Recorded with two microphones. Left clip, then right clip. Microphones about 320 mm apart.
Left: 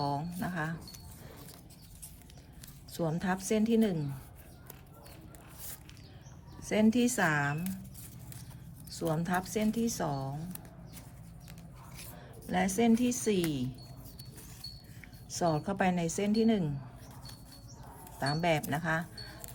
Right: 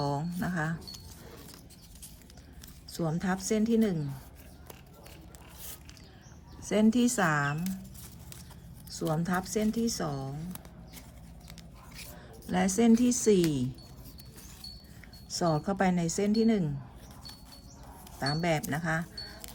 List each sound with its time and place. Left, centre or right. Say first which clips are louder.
0.0 s a sound: right 1 dB; centre
2.9 s a woman's voice: even; centre
6.6 s a woman's voice: right 2 dB; centre
8.9 s speech: right 1 dB; centre
12.5 s a woman's voice: right 2 dB; centre
15.3 s a woman's voice: right 2 dB; centre
18.2 s a woman's voice: even; centre